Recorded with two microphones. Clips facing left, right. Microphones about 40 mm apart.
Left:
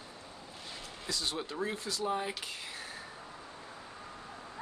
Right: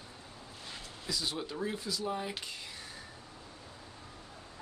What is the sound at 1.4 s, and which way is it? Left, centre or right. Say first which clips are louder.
Speech: left 1 dB; centre.